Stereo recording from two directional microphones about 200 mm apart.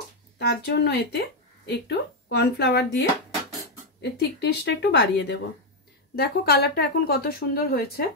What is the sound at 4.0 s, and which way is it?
Speech, 55° left (ahead or behind).